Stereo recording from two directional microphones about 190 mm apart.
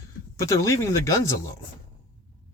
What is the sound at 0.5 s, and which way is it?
Speech, 15° left (ahead or behind).